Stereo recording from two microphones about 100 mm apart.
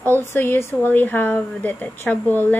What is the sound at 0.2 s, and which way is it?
Speech, 20° left (ahead or behind).